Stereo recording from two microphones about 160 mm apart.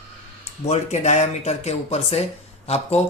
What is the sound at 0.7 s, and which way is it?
Speech, 45° left (ahead or behind).